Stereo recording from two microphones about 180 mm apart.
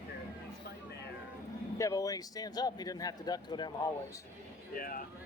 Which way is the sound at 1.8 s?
20° left (ahead or behind).